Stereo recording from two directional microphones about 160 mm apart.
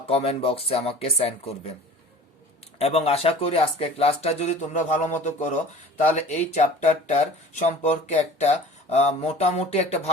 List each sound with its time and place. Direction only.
0.1 s speech: 40° left (ahead or behind)
2.7 s speech: 40° left (ahead or behind)